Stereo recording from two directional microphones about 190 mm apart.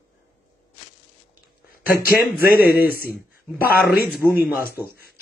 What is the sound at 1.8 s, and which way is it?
Speech, 50° left (ahead or behind).